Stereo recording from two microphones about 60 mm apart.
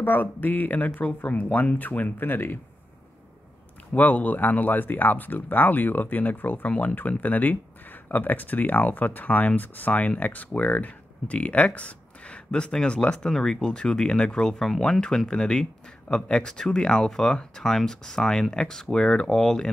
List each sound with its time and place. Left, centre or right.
0.0 s speech: left
3.9 s speech: left; by 19.7 s centre